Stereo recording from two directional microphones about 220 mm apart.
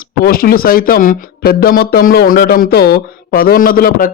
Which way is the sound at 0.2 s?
40° left (ahead or behind).